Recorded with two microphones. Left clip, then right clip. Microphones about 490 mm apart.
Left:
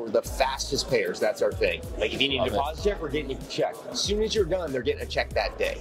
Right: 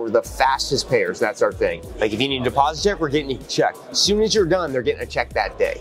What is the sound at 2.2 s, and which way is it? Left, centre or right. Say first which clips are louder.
Speech: right 6 dB; right.